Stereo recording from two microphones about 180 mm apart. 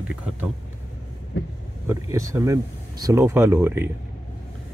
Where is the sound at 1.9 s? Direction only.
15° right (ahead or behind).